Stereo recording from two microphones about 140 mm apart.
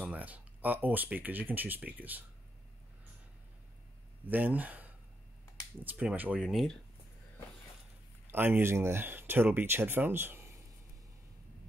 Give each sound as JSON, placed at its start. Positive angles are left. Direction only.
{"t": 0.0, "sound": "speech", "side_deg": -10}
{"t": 4.3, "sound": "speech", "side_deg": -10}
{"t": 5.9, "sound": "speech", "side_deg": -10}
{"t": 6.4, "sound": "speech", "side_deg": 0}
{"t": 8.3, "sound": "speech", "side_deg": -15}